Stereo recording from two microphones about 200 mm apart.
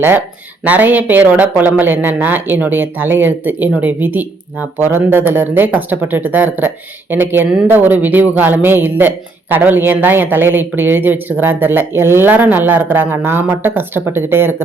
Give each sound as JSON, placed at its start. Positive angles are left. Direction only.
{"t": 0.6, "sound": "speech", "side_deg": -10}